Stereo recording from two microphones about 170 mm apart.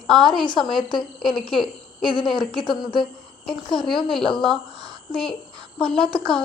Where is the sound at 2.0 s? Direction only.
30° left (ahead or behind).